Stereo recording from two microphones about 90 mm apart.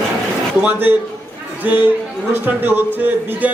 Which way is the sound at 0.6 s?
20° right (ahead or behind).